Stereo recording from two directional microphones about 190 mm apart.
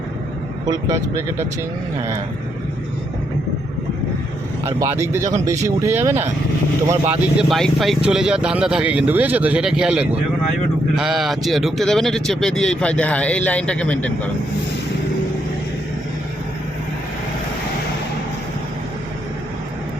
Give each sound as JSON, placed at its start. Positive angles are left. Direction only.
{"t": 0.7, "sound": "speech", "side_deg": -15}
{"t": 4.6, "sound": "a man's voice", "side_deg": -15}